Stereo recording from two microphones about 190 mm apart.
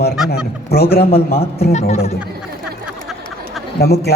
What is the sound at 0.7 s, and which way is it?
Speech, 55° left (ahead or behind).